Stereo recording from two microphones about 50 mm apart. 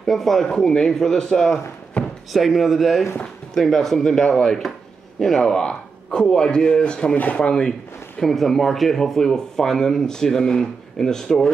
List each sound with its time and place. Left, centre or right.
0.0 s speech: centre
2.3 s speech: centre
8.2 s speech: centre